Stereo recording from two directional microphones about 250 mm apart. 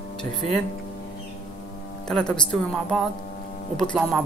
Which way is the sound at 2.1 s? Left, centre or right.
Centre.